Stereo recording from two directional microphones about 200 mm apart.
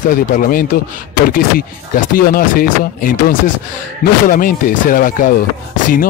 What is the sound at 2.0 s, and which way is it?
Speech, 45° left (ahead or behind).